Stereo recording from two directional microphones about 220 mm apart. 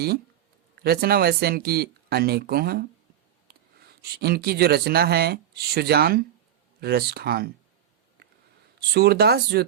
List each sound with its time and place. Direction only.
0.8 s speech: 45° right (ahead or behind)
8.9 s speech: 45° right (ahead or behind)